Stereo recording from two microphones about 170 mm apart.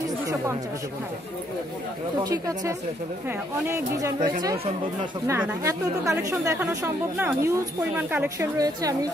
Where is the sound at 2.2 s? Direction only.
20° right (ahead or behind).